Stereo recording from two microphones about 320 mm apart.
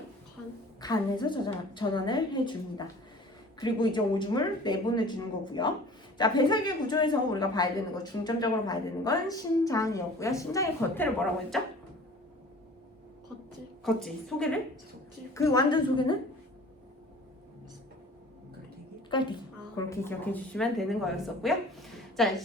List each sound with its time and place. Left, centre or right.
0.8 s speech: centre
13.8 s a woman's voice: centre
19.1 s a woman's voice: centre